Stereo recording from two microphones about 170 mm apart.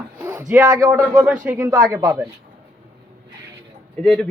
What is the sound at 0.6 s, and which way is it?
Speech, 20° right (ahead or behind).